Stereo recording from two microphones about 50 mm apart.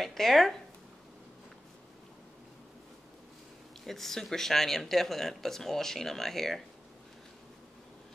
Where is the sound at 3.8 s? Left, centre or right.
Centre.